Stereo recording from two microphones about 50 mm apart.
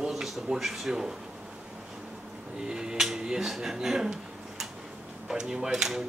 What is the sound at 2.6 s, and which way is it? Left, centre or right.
Speech, centre.